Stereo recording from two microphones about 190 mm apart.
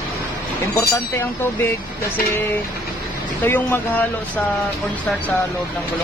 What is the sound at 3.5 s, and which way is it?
Speech, 10° left (ahead or behind).